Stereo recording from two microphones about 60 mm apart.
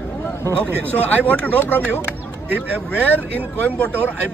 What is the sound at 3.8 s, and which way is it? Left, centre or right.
Speech, left.